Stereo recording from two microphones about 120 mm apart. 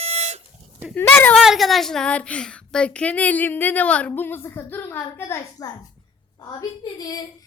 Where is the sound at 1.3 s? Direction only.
Centre (ahead or behind); by 5.4 s 20° left (ahead or behind).